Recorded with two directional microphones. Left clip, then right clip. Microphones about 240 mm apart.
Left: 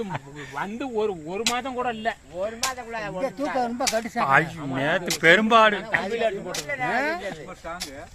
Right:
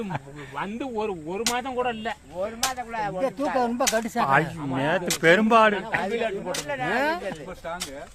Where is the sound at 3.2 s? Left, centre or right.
Centre.